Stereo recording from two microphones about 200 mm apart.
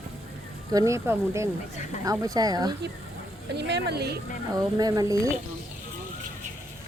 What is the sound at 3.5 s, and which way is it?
Speech, 55° right (ahead or behind).